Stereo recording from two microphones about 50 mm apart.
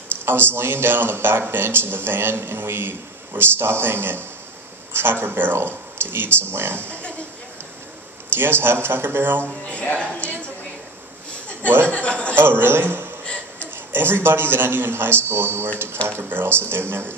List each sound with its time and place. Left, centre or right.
0.2 s speech: right
7.0 s a sound: left
8.4 s speech: right
9.4 s a woman's voice: left
11.6 s speech: right
11.9 s a woman's voice: left
12.4 s speech: right